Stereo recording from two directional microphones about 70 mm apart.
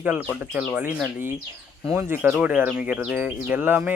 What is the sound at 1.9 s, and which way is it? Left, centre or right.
Speech, right.